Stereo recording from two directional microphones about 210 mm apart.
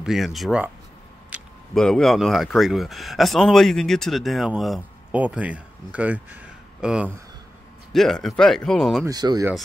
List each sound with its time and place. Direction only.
0.0 s speech: centre (ahead or behind)
9.0 s speech: 20° right (ahead or behind)